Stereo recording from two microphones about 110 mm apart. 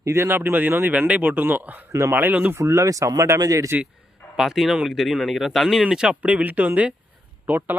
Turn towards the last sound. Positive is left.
turn(degrees=-15)  # may be behind; listen again after turning